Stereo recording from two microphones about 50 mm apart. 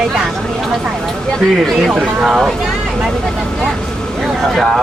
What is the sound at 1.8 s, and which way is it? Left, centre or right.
Speech, centre.